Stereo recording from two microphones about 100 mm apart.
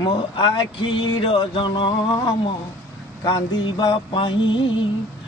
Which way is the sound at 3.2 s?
50° left (ahead or behind).